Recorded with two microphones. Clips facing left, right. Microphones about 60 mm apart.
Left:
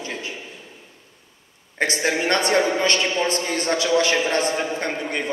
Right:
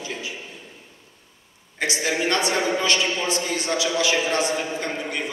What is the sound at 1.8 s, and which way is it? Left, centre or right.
A man's voice, left.